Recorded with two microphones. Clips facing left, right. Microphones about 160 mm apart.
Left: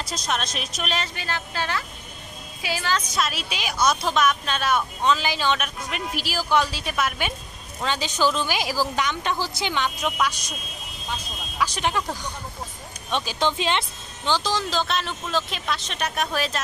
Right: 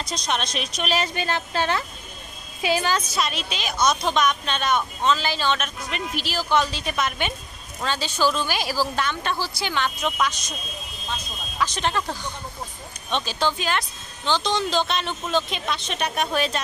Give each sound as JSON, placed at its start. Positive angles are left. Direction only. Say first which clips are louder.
{"t": 0.0, "sound": "speech", "louder": "right 1 dB", "side_deg": 5}
{"t": 1.1, "sound": "a woman's voice", "louder": "right 5 dB", "side_deg": -25}
{"t": 3.1, "sound": "a woman's voice", "louder": "even", "side_deg": 0}
{"t": 11.5, "sound": "speech", "louder": "even", "side_deg": 10}
{"t": 14.2, "sound": "speech", "louder": "right 1 dB", "side_deg": 10}